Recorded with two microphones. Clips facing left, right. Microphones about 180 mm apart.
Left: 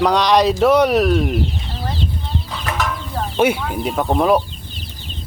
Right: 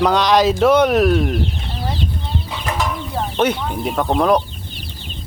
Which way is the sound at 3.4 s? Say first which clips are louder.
Left 2 dB; 10° left (ahead or behind).